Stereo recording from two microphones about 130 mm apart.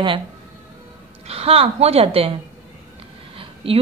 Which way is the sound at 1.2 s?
50° right (ahead or behind).